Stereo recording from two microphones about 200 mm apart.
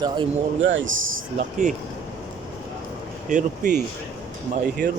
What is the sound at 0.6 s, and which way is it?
Speech, 70° right (ahead or behind).